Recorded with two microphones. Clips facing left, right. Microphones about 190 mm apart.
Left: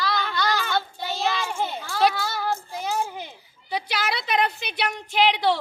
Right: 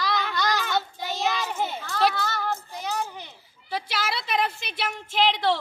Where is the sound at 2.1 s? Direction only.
10° left (ahead or behind).